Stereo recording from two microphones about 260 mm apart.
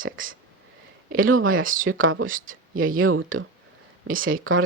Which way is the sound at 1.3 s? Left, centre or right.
Right.